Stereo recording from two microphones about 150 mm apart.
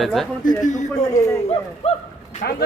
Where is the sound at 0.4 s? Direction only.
55° left (ahead or behind).